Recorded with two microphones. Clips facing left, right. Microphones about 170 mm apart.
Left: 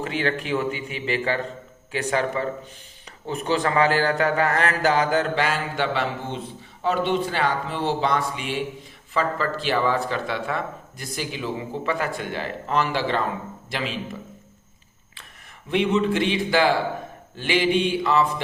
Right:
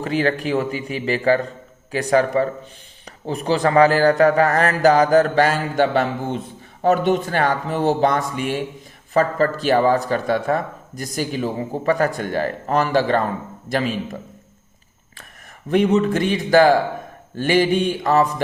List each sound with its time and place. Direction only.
0.0 s a man's voice: 35° right (ahead or behind)
15.7 s speech: 45° right (ahead or behind)